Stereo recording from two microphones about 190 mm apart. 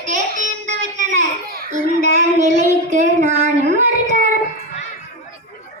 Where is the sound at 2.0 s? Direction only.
40° right (ahead or behind).